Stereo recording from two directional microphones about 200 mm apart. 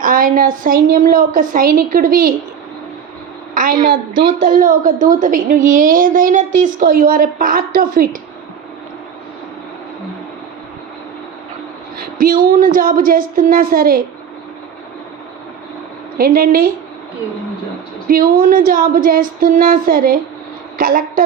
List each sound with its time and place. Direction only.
0.0 s a woman's voice: 45° right (ahead or behind)
3.5 s a woman's voice: 45° right (ahead or behind)
12.1 s a woman's voice: 45° right (ahead or behind)
16.1 s a woman's voice: 45° right (ahead or behind)
18.1 s a woman's voice: 45° right (ahead or behind)